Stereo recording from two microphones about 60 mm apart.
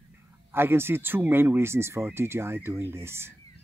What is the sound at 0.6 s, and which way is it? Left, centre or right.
Speech, right.